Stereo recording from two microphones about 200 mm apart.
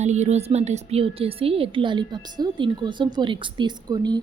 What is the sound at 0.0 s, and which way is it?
A woman's voice, 35° right (ahead or behind).